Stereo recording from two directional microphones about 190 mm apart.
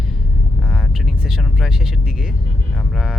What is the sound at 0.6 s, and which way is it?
Speech, centre (ahead or behind).